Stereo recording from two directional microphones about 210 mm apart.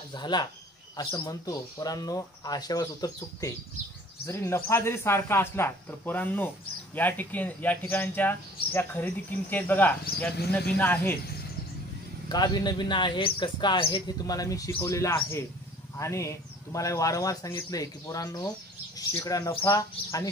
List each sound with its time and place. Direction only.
0.1 s speech: 20° left (ahead or behind)
12.3 s speech: 20° left (ahead or behind)